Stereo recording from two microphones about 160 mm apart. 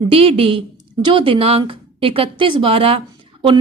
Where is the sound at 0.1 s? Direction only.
35° right (ahead or behind).